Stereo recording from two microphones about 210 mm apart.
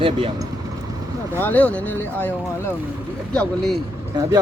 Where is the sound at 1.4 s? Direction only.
5° left (ahead or behind).